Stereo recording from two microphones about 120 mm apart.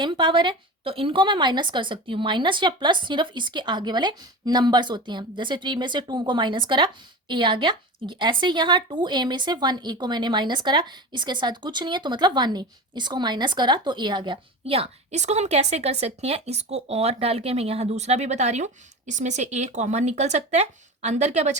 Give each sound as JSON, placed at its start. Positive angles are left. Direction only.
{"t": 0.0, "sound": "speech", "side_deg": -40}